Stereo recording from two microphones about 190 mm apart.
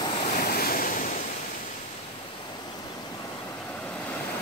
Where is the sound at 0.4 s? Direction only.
50° left (ahead or behind).